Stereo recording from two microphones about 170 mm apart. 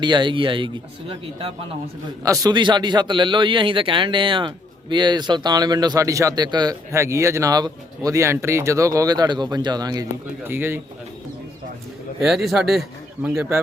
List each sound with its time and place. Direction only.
0.0 s speech: 25° right (ahead or behind)
2.2 s speech: 20° right (ahead or behind)
12.2 s a man's voice: centre (ahead or behind)